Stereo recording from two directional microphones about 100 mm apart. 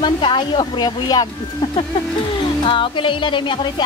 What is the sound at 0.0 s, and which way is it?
Speech, 55° left (ahead or behind).